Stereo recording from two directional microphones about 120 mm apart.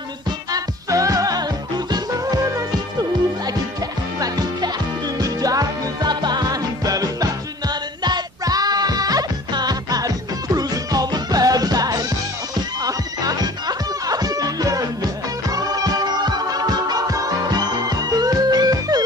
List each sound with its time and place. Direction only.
0.5 s music: 30° right (ahead or behind)
4.2 s music: 30° right (ahead or behind)